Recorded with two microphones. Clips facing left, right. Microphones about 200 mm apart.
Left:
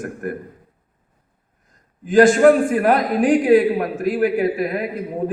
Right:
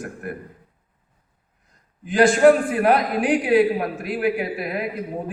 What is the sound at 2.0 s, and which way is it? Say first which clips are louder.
A man's voice: left 3 dB; 45° left (ahead or behind).